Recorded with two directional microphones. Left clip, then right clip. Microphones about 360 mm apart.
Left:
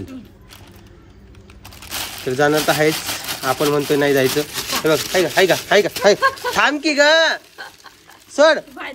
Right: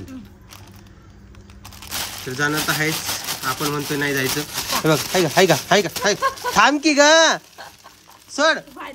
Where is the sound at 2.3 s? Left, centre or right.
Centre.